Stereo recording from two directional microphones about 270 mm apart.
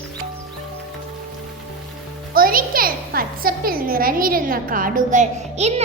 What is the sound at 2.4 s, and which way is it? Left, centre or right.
A child's voice, right.